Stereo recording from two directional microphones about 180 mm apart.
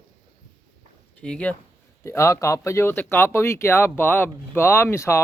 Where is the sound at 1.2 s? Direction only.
5° left (ahead or behind).